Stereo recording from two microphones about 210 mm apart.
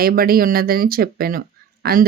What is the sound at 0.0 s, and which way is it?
Speech, 45° right (ahead or behind).